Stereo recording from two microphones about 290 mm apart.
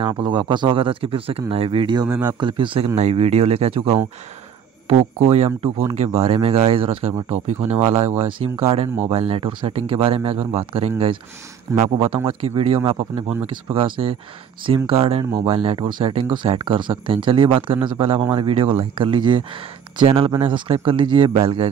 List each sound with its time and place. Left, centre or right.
0.0 s speech: centre
5.3 s speech: right